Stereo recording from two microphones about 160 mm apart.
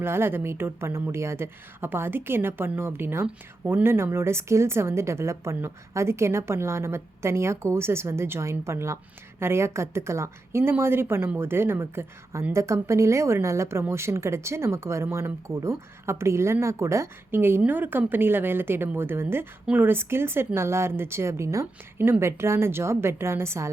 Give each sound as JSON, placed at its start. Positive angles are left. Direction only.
{"t": 0.0, "sound": "speech", "side_deg": -15}